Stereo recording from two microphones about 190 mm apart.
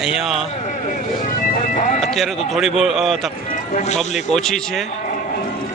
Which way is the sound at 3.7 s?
35° left (ahead or behind).